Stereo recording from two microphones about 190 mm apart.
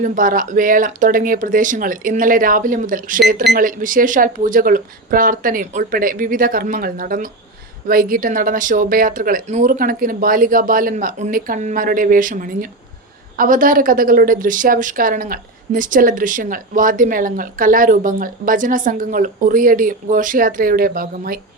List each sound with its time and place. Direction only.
0.0 s a woman's voice: 45° right (ahead or behind)